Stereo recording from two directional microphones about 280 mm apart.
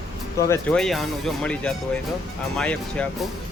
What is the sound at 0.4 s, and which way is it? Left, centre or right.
Speech, centre.